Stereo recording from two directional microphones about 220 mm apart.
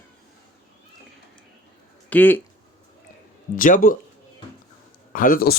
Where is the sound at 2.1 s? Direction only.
10° left (ahead or behind).